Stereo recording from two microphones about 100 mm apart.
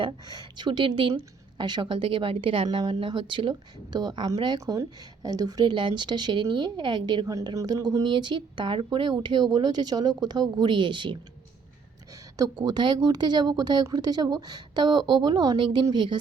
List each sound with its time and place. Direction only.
0.0 s speech: 45° right (ahead or behind)
2.6 s speech: 45° right (ahead or behind)
2.9 s speech: 60° right (ahead or behind)
3.5 s speech: 45° right (ahead or behind)
4.6 s speech: 35° right (ahead or behind)
7.3 s speech: 35° right (ahead or behind); by 11.2 s 55° right (ahead or behind)
12.4 s speech: 40° right (ahead or behind)